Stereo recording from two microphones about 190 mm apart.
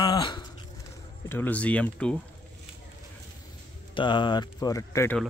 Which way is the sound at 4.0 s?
25° left (ahead or behind).